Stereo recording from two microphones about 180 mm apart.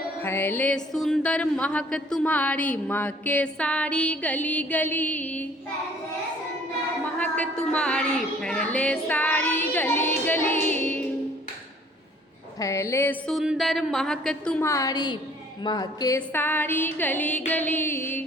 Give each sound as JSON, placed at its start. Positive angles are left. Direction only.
{"t": 0.2, "sound": "music", "side_deg": 10}
{"t": 7.0, "sound": "music", "side_deg": 10}
{"t": 12.5, "sound": "a woman's voice", "side_deg": 15}
{"t": 14.6, "sound": "a woman's voice", "side_deg": 15}
{"t": 15.6, "sound": "music", "side_deg": 20}